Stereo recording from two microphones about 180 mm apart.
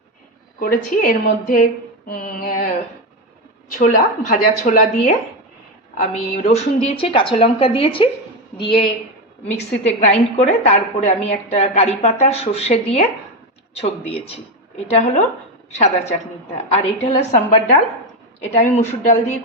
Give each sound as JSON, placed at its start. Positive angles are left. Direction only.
{"t": 0.6, "sound": "a woman's voice", "side_deg": 50}
{"t": 3.7, "sound": "a woman's voice", "side_deg": 45}
{"t": 14.8, "sound": "a woman's voice", "side_deg": 40}